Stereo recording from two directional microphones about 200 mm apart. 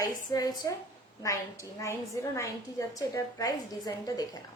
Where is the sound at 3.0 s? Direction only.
20° left (ahead or behind).